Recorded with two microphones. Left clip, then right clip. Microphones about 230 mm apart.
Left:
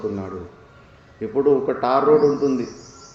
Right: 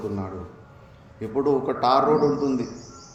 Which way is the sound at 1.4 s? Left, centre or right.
Right.